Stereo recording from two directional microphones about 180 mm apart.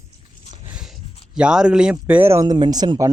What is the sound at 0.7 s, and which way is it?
Speech, 5° right (ahead or behind).